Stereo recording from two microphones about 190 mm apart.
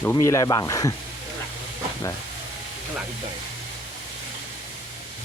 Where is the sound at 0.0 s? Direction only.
15° left (ahead or behind).